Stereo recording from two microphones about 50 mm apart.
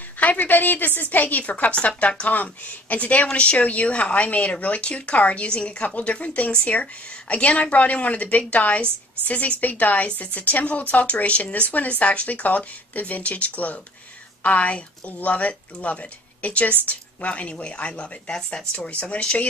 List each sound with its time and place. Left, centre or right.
0.2 s a woman's voice: left